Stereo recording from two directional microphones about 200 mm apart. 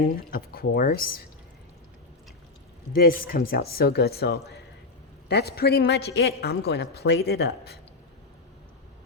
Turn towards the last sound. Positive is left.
turn(degrees=55)  # may be behind; listen again after turning